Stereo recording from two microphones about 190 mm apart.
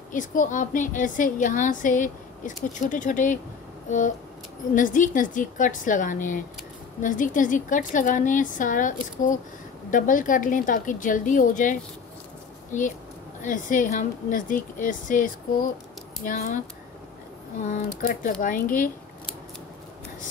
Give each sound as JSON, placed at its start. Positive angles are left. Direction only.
{"t": 0.1, "sound": "a woman's voice", "side_deg": 45}
{"t": 4.7, "sound": "a woman's voice", "side_deg": 45}
{"t": 13.4, "sound": "a woman's voice", "side_deg": 45}
{"t": 17.6, "sound": "a woman's voice", "side_deg": 45}